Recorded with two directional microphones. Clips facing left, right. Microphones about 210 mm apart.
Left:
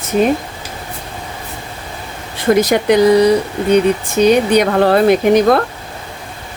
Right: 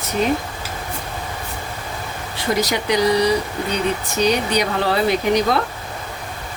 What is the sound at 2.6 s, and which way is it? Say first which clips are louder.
Speech: left 7 dB; 55° left (ahead or behind).